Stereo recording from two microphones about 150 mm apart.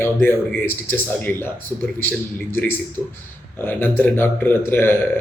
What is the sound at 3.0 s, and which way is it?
Speech, 15° left (ahead or behind).